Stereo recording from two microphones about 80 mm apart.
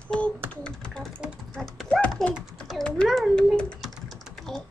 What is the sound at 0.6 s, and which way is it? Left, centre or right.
Typing, centre.